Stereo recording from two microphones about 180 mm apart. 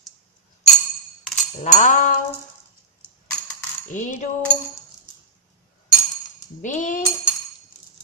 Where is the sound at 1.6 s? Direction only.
45° left (ahead or behind).